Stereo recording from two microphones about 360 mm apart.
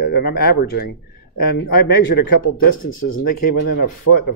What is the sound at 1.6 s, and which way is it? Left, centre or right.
Speech, left.